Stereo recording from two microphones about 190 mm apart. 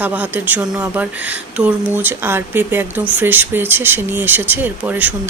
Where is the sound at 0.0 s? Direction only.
10° right (ahead or behind).